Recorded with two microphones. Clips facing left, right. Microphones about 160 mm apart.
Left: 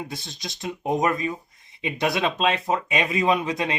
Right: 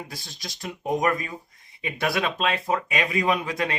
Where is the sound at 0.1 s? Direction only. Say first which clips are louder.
Left 4 dB; 20° left (ahead or behind).